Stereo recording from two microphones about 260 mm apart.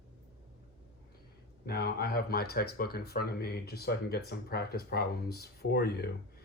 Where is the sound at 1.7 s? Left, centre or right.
Left.